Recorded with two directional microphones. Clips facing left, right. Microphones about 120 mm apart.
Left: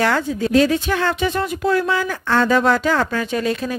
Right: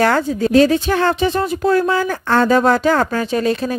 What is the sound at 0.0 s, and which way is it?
Speech, 40° right (ahead or behind).